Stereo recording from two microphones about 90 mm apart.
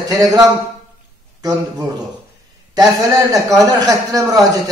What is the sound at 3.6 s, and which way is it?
Speech, 45° right (ahead or behind).